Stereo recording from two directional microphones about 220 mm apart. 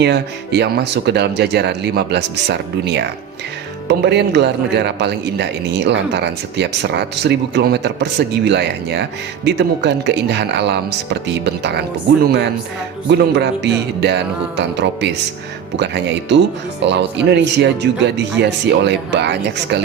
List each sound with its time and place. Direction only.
0.0 s speech: 50° right (ahead or behind)